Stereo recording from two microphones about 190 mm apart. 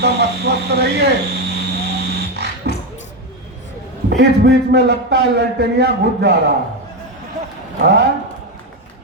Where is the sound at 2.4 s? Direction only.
60° right (ahead or behind).